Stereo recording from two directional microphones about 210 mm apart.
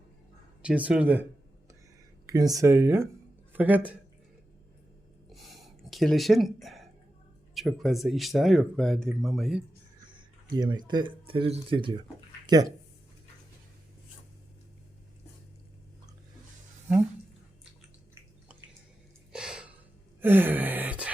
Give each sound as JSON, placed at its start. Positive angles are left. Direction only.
{"t": 0.6, "sound": "speech", "side_deg": -5}
{"t": 5.3, "sound": "a sound", "side_deg": 0}
{"t": 7.5, "sound": "speech", "side_deg": 0}
{"t": 10.1, "sound": "speech", "side_deg": -20}
{"t": 19.3, "sound": "a sound", "side_deg": -5}
{"t": 20.2, "sound": "gasp", "side_deg": -10}